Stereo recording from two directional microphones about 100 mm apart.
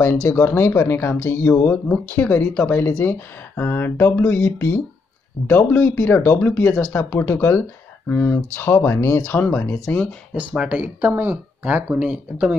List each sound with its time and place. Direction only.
0.4 s speech: 25° left (ahead or behind)
9.2 s speech: 15° left (ahead or behind)
10.3 s speech: 10° right (ahead or behind)